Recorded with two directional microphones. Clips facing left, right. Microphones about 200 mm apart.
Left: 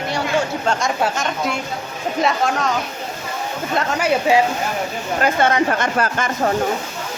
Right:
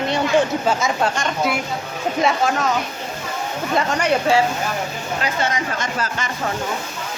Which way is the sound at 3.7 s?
5° left (ahead or behind).